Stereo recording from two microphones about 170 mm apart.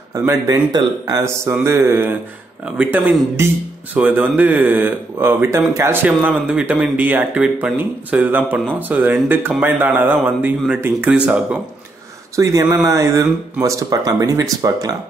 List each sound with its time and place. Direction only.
0.1 s speech: 15° right (ahead or behind)
12.4 s speech: 20° right (ahead or behind)